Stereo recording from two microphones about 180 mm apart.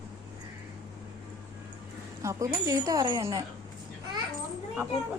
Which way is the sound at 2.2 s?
15° right (ahead or behind).